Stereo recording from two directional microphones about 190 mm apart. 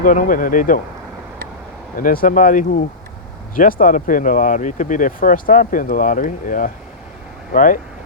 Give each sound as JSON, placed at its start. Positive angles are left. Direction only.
{"t": 0.0, "sound": "speech", "side_deg": 45}
{"t": 2.0, "sound": "speech", "side_deg": 45}